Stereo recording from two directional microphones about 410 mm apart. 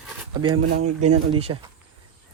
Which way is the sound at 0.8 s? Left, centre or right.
Right.